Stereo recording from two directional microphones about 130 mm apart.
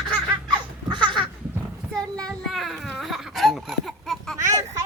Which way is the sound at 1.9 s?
5° left (ahead or behind).